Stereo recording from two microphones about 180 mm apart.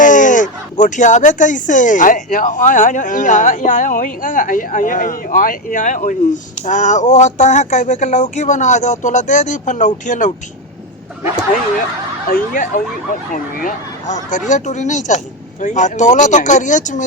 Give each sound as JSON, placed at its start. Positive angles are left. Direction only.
{"t": 0.0, "sound": "speech", "side_deg": 45}
{"t": 12.3, "sound": "speech", "side_deg": 50}